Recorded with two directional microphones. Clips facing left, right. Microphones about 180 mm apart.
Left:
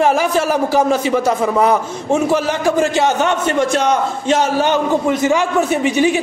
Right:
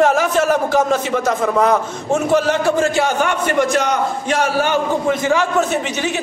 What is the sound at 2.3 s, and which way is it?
A man's voice, 15° left (ahead or behind).